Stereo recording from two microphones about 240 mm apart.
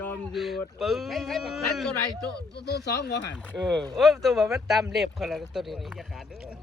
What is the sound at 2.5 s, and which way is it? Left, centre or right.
Speech, left.